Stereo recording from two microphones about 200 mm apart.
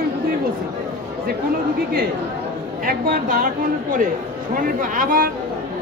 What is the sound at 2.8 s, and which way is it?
Speech, 45° right (ahead or behind).